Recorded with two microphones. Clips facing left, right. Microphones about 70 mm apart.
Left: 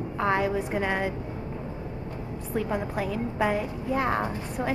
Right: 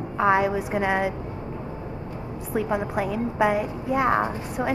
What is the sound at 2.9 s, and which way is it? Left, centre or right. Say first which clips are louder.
A woman's voice: right 4 dB; centre.